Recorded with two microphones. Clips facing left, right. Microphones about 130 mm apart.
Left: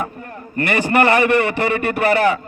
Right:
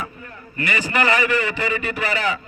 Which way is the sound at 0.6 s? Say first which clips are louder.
Left 6 dB; 60° left (ahead or behind).